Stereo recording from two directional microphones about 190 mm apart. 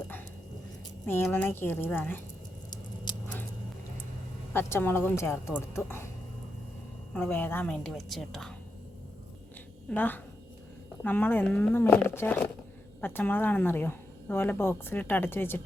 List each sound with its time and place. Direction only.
1.0 s speech: 10° left (ahead or behind)
2.6 s rodents: 25° left (ahead or behind)
4.5 s speech: 10° left (ahead or behind)
7.1 s a woman's voice: 10° left (ahead or behind)
9.9 s speech: 10° left (ahead or behind)